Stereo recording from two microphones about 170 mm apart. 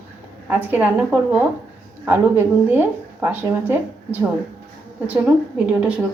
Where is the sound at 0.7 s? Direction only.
10° right (ahead or behind).